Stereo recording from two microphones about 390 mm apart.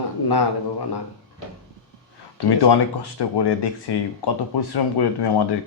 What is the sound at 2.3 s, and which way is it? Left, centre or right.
Speech, left.